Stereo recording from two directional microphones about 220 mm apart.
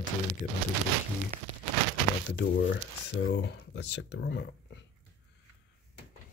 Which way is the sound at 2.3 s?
55° left (ahead or behind).